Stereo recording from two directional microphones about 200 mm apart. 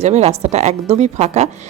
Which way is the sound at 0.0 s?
30° right (ahead or behind).